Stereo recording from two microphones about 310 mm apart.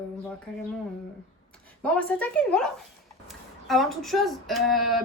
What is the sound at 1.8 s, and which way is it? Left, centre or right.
A woman's voice, centre.